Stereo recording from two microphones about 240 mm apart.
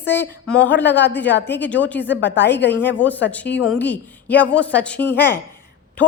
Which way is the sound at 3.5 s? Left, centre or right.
Left.